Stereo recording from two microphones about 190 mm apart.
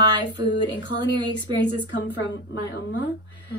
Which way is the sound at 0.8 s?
65° left (ahead or behind).